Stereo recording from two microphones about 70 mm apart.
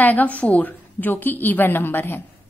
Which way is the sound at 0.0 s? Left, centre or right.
Left.